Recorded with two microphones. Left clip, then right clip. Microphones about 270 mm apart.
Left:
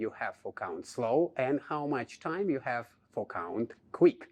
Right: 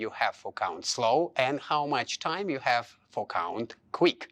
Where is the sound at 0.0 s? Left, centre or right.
Right.